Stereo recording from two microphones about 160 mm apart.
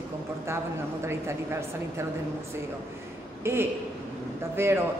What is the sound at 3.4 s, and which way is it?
A man's voice, 15° right (ahead or behind).